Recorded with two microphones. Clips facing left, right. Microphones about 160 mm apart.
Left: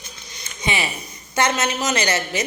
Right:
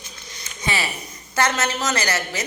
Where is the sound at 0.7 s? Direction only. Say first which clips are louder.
Left 1 dB; 20° left (ahead or behind).